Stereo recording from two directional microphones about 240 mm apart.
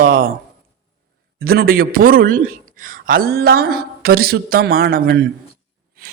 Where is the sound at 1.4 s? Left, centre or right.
Right.